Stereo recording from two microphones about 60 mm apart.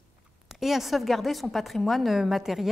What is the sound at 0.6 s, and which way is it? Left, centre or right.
A woman's voice, centre.